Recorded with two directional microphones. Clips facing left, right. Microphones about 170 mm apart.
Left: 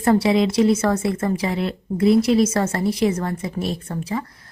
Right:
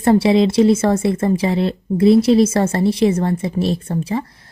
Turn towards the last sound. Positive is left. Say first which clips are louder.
# right 5 dB
turn(degrees=-30)  # may be behind; listen again after turning